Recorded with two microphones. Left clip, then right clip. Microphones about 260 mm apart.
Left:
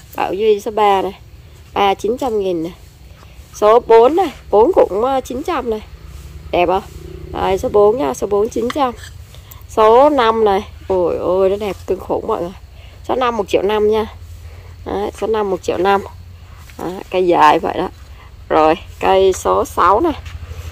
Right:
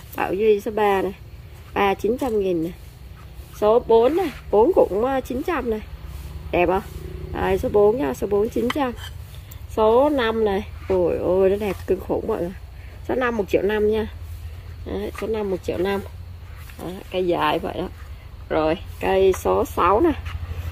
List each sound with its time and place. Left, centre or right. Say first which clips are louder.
0.1 s a woman's voice: left 4 dB; centre
17.1 s a woman's voice: left 10 dB; centre